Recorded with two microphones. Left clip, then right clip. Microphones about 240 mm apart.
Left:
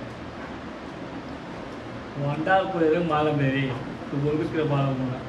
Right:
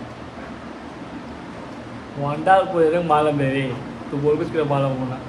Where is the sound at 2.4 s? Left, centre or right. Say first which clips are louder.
Right 6 dB; centre.